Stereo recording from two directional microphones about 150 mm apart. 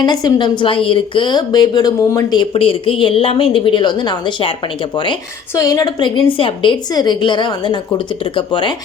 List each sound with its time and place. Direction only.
0.0 s a woman's voice: 30° left (ahead or behind)
2.4 s a woman's voice: 40° left (ahead or behind)
5.5 s a woman's voice: 25° left (ahead or behind)
6.1 s a woman's voice: 35° left (ahead or behind)